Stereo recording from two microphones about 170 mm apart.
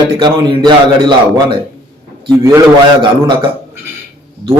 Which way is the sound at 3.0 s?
25° right (ahead or behind).